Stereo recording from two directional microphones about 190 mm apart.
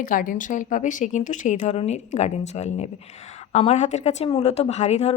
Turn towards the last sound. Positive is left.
turn(degrees=35)  # may be behind; listen again after turning